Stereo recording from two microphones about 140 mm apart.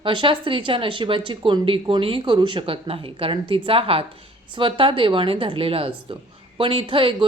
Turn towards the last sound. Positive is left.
turn(degrees=-40)  # may be behind; listen again after turning